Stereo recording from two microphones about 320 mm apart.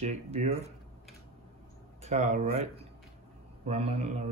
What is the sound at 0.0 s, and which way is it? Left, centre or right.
Speech, centre.